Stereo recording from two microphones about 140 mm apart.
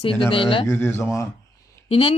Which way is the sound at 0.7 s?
15° left (ahead or behind).